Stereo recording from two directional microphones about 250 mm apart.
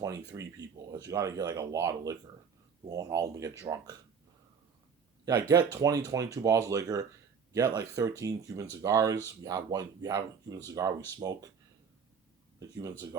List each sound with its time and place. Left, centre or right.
0.0 s speech: centre
5.2 s speech: centre
12.5 s speech: centre